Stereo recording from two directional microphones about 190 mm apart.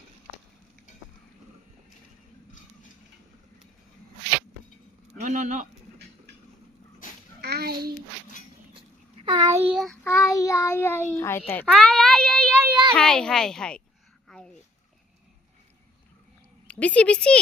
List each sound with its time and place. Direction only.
5.2 s speech: 40° right (ahead or behind)
7.0 s dog: 45° left (ahead or behind)
7.4 s a sound: 55° right (ahead or behind)
9.2 s a child's voice: 20° right (ahead or behind)
9.7 s child singing: 5° left (ahead or behind)
11.6 s speech: centre (ahead or behind)
14.3 s a sound: 5° left (ahead or behind)
16.6 s speech: 5° left (ahead or behind)